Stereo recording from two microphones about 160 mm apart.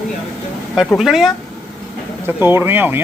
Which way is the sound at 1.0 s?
Centre (ahead or behind).